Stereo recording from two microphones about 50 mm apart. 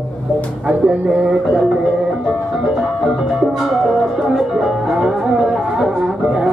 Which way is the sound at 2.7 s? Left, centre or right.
Centre.